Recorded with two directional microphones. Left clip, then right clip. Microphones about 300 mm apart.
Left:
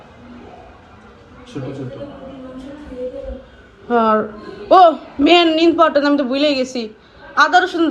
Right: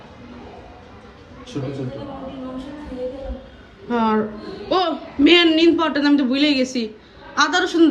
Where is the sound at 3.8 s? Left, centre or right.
Centre.